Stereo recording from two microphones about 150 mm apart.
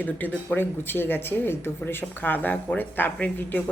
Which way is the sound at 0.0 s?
10° left (ahead or behind).